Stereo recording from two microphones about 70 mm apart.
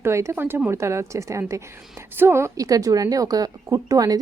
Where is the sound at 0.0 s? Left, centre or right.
Right.